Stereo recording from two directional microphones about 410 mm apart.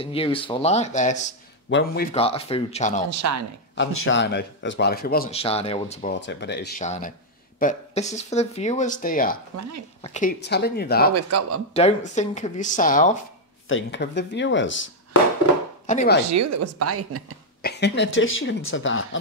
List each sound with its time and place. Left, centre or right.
0.0 s speech: centre
3.1 s speech: right
3.7 s speech: left
9.6 s speech: right
10.0 s speech: centre
11.1 s speech: right
11.7 s speech: centre
15.9 s speech: centre
16.3 s speech: right
17.6 s speech: left